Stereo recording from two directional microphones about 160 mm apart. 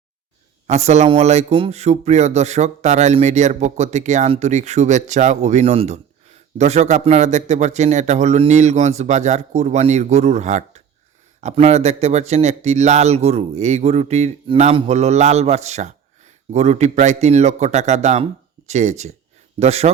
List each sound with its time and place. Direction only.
0.7 s a man's voice: 45° right (ahead or behind)